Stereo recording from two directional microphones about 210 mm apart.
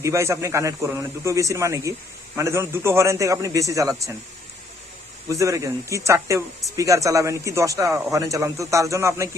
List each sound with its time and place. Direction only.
0.0 s a man's voice: 15° right (ahead or behind)
5.3 s a man's voice: 15° right (ahead or behind)